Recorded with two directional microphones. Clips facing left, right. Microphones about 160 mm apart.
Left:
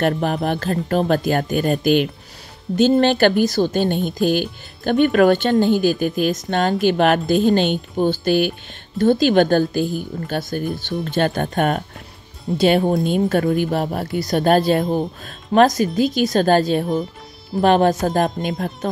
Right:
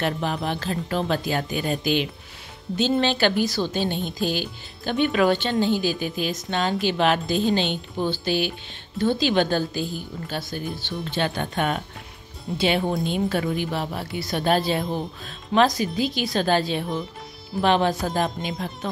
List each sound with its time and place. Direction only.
0.0 s speech: 50° left (ahead or behind)